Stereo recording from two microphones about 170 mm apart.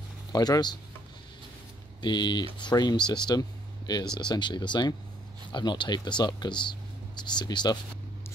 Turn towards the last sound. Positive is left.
turn(degrees=25)  # may be behind; listen again after turning